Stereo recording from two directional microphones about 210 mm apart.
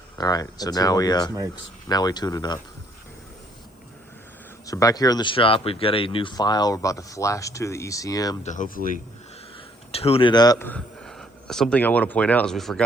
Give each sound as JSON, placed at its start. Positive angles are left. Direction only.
{"t": 0.2, "sound": "speech", "side_deg": 20}
{"t": 4.6, "sound": "speech", "side_deg": 15}
{"t": 8.4, "sound": "speech", "side_deg": 40}
{"t": 9.9, "sound": "speech", "side_deg": 30}